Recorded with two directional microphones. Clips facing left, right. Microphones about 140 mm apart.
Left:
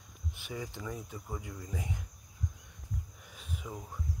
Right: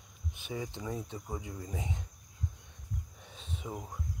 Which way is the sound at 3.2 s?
25° right (ahead or behind).